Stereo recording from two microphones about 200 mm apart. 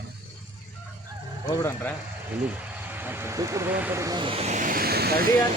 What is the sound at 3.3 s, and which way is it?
Speech, 15° right (ahead or behind).